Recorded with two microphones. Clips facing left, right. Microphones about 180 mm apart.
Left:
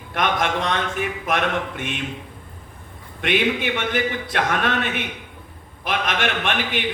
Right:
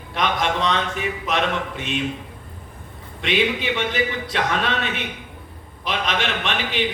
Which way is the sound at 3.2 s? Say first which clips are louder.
Left 1 dB; 55° left (ahead or behind).